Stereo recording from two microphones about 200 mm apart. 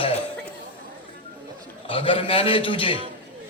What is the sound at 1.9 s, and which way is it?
A man's voice, 25° left (ahead or behind).